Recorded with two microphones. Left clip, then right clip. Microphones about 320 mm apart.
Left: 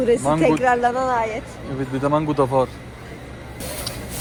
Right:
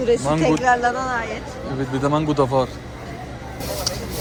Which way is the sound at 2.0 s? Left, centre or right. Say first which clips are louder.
Even; centre.